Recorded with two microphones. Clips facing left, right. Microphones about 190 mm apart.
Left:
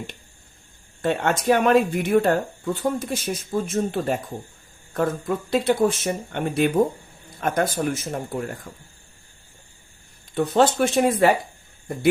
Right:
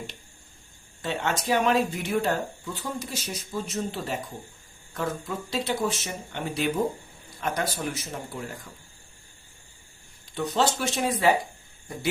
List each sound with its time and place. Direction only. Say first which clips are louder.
1.0 s speech: left 7 dB; 55° left (ahead or behind)
10.3 s speech: left 7 dB; 55° left (ahead or behind)